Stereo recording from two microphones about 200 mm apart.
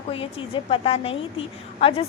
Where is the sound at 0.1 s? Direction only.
25° left (ahead or behind).